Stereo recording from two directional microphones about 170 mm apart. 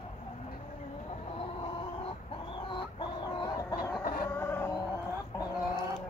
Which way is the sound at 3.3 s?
25° left (ahead or behind).